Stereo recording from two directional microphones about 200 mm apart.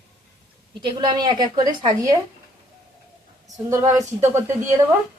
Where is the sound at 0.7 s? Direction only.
20° right (ahead or behind).